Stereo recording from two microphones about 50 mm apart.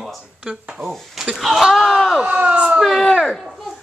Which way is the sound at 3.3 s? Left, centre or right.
Centre.